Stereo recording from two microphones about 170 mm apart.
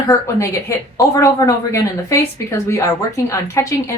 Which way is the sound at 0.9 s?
20° left (ahead or behind).